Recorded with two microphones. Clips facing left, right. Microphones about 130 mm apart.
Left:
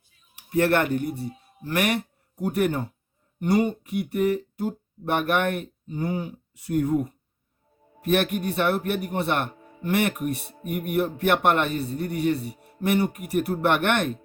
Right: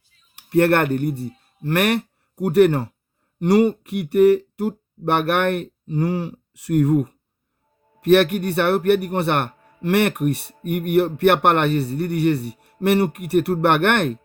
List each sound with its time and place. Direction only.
0.3 s a man's voice: 60° right (ahead or behind); by 7.1 s 85° right
8.0 s a man's voice: 70° right (ahead or behind)